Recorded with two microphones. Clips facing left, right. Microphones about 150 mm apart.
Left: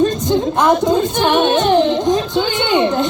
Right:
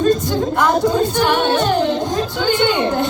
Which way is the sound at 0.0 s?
20° left (ahead or behind).